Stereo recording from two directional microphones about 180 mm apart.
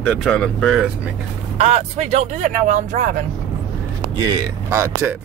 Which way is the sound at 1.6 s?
35° right (ahead or behind).